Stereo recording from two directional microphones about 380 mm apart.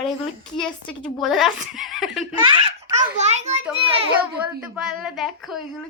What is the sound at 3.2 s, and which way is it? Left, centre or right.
Babbling, centre.